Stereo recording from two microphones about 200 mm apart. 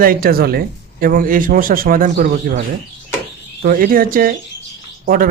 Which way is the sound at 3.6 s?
45° right (ahead or behind).